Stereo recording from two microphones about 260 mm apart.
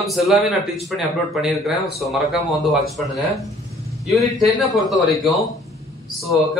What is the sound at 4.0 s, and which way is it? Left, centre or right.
A man's voice, centre.